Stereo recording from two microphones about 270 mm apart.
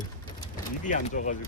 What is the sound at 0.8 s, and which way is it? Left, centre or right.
Speech, left.